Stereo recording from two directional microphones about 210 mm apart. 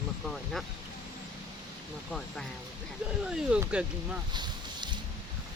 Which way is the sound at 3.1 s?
5° right (ahead or behind).